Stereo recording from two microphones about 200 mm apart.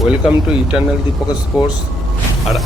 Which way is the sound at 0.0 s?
5° right (ahead or behind).